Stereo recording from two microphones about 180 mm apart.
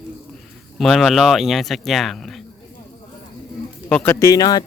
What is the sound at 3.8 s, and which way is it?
Speech, 10° left (ahead or behind).